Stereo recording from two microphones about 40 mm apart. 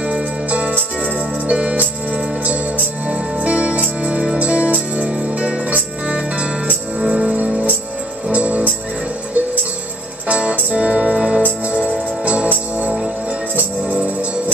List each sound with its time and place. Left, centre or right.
0.0 s music: right
3.1 s music: right
5.2 s jingle bell: right
5.7 s music: right
8.3 s music: right
10.2 s music: right